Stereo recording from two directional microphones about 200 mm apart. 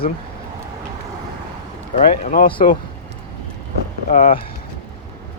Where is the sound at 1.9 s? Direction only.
40° left (ahead or behind).